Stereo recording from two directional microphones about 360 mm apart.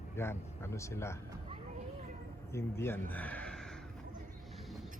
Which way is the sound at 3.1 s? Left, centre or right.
Centre.